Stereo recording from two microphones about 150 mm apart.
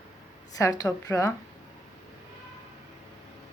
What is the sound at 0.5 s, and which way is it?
Speech, 25° left (ahead or behind).